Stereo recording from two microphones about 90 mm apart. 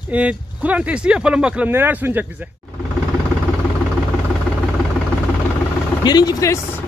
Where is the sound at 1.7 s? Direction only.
25° right (ahead or behind).